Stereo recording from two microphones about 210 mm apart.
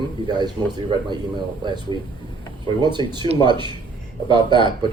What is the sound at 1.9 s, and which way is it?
A man's voice, 20° right (ahead or behind).